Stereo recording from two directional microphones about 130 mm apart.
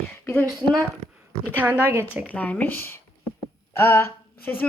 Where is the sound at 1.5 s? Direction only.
15° right (ahead or behind).